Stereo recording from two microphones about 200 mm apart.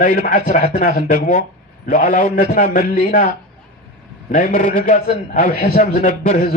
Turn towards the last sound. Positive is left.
turn(degrees=35)  # may be behind; listen again after turning